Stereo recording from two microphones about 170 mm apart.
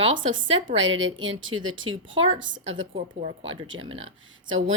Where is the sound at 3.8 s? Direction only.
35° right (ahead or behind).